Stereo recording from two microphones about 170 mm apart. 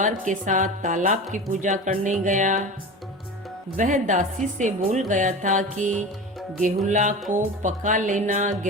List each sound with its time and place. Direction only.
0.0 s speech: 50° right (ahead or behind)
3.8 s speech: 50° right (ahead or behind)